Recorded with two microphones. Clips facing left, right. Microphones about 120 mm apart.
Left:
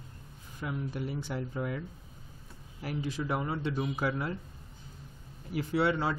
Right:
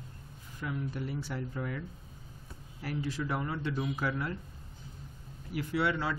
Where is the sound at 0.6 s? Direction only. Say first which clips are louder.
Left 1 dB; 15° left (ahead or behind).